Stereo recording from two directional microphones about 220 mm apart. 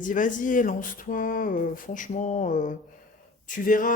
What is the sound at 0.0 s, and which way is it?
Speech, 35° left (ahead or behind).